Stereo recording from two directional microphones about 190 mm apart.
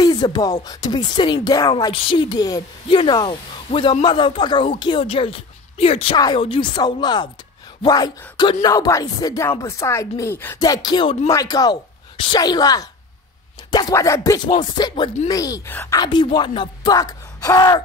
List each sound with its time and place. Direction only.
0.0 s speech: 20° left (ahead or behind)